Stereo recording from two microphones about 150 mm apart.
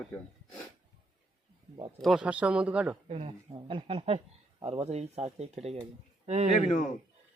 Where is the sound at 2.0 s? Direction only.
5° right (ahead or behind).